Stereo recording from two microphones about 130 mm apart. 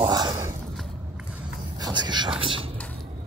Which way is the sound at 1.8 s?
35° right (ahead or behind).